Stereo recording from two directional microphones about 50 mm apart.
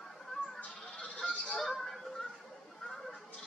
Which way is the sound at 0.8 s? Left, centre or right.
Centre.